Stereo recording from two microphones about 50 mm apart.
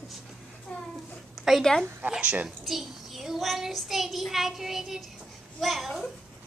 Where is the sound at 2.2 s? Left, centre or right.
Right.